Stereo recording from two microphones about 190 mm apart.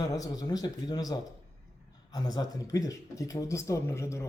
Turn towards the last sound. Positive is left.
turn(degrees=15)  # may be behind; listen again after turning